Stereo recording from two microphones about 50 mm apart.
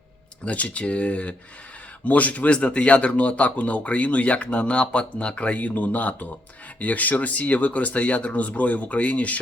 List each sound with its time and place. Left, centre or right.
0.4 s speech: left